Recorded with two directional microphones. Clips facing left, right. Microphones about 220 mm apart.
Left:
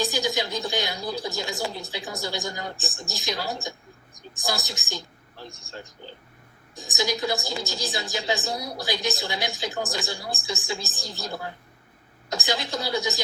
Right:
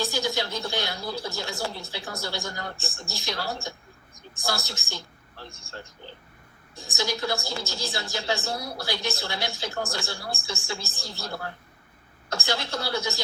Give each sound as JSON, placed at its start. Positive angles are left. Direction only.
{"t": 0.0, "sound": "a woman's voice", "side_deg": 15}